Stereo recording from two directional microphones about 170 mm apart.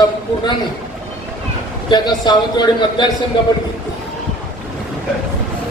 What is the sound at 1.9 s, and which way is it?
A man's voice, 25° left (ahead or behind).